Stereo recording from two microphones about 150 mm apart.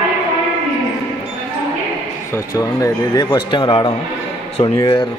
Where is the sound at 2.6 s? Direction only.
20° left (ahead or behind).